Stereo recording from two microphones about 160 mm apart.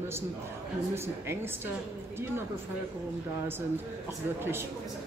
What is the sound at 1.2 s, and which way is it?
Speech, 15° right (ahead or behind).